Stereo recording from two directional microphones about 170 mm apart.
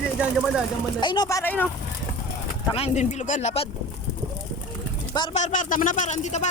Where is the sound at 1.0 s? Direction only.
25° left (ahead or behind).